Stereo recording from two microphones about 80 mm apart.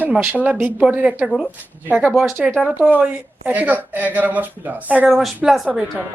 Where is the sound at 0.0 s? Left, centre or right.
Right.